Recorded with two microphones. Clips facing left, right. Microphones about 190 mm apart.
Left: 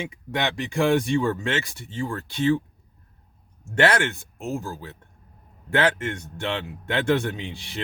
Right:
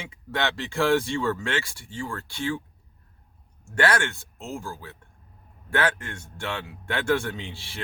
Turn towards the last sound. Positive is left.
turn(degrees=20)  # may be behind; listen again after turning